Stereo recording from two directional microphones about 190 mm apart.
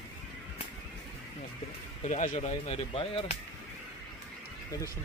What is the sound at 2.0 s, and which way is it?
Speech, 40° left (ahead or behind).